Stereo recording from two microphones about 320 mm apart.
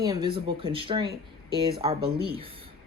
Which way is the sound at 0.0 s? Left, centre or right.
Centre.